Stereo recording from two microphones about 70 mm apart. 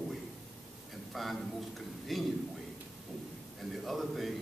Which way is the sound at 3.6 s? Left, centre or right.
Centre.